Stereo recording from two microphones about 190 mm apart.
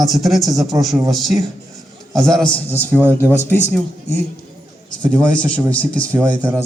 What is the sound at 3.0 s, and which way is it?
Speech, 10° right (ahead or behind).